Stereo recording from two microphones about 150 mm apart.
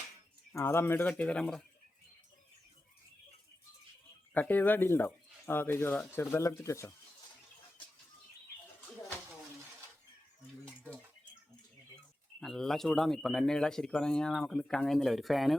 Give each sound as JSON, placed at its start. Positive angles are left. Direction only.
{"t": 0.5, "sound": "speech", "side_deg": 15}
{"t": 4.4, "sound": "speech", "side_deg": 10}
{"t": 12.4, "sound": "speech", "side_deg": 0}